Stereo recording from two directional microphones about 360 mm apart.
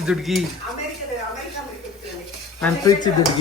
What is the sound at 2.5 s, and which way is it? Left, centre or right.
Speech, centre.